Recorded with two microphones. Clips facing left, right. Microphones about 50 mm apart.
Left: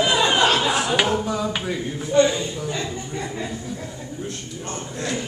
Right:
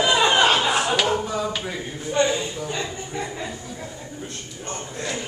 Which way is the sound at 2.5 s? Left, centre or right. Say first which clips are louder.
Left 1 dB; centre.